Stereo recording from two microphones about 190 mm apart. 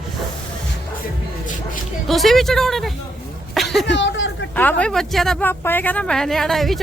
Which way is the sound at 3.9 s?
75° left (ahead or behind).